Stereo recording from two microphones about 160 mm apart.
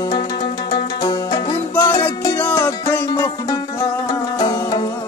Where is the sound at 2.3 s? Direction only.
10° left (ahead or behind).